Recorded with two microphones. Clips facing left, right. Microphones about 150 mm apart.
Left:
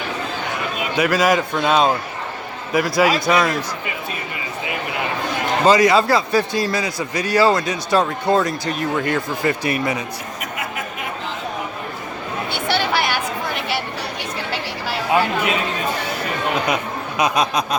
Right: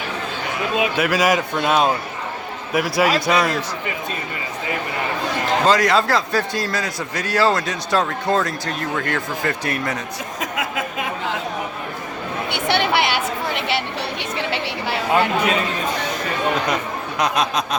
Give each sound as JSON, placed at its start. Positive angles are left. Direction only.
{"t": 0.9, "sound": "a man's voice", "side_deg": -5}
{"t": 5.6, "sound": "a man's voice", "side_deg": 5}
{"t": 10.4, "sound": "a sound", "side_deg": -90}
{"t": 12.5, "sound": "a sound", "side_deg": -20}
{"t": 14.3, "sound": "speech", "side_deg": -25}
{"t": 17.2, "sound": "a man's voice", "side_deg": 0}